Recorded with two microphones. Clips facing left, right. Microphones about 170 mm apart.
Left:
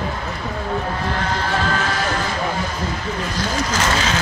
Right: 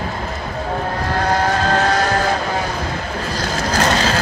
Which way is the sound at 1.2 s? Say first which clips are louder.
Right 7 dB; 40° right (ahead or behind).